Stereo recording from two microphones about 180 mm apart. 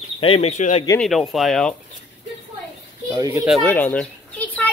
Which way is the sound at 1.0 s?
Centre (ahead or behind).